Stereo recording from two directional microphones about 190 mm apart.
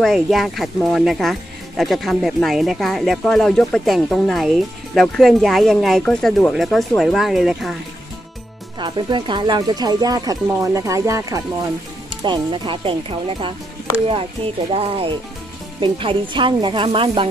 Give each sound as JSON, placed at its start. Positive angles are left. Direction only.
{"t": 0.0, "sound": "speech", "side_deg": 0}
{"t": 8.7, "sound": "speech", "side_deg": -25}
{"t": 14.7, "sound": "speech", "side_deg": -30}